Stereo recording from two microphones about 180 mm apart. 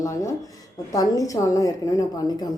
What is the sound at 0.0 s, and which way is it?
A woman's voice, 15° left (ahead or behind).